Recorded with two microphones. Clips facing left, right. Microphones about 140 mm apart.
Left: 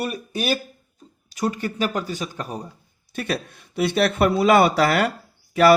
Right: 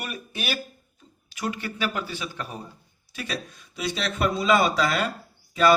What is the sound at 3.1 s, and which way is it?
Speech, 55° left (ahead or behind).